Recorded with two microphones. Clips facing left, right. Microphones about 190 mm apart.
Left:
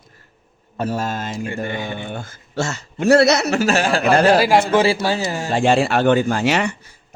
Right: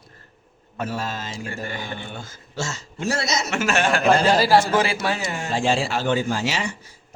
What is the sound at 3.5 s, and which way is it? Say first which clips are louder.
Speech: left 4 dB; 35° left (ahead or behind).